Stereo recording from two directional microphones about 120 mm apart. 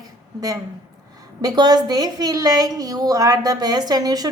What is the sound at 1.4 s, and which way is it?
A woman's voice, 35° right (ahead or behind).